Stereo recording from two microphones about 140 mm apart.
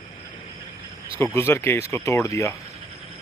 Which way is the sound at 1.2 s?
15° left (ahead or behind).